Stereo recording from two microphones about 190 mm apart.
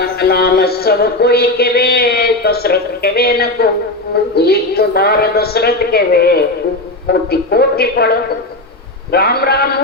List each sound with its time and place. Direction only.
0.2 s music: 55° left (ahead or behind)
4.1 s a woman's voice: 55° left (ahead or behind)